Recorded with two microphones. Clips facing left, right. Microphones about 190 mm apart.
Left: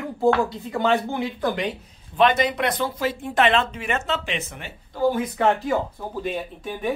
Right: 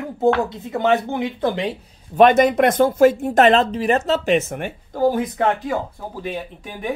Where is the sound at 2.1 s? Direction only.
45° right (ahead or behind).